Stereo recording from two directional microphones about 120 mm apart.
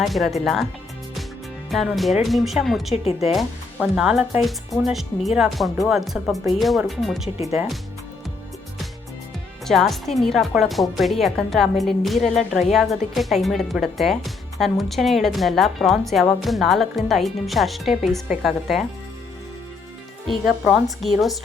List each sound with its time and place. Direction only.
0.0 s speech: centre (ahead or behind)
1.7 s speech: centre (ahead or behind)
2.9 s speech: 60° left (ahead or behind)
3.8 s speech: 5° right (ahead or behind)
9.6 s speech: centre (ahead or behind)
20.2 s speech: centre (ahead or behind)